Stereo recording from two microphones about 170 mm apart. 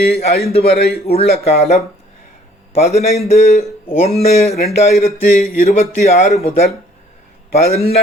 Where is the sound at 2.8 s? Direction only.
40° left (ahead or behind).